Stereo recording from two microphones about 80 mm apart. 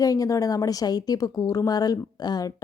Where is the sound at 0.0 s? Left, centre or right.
Left.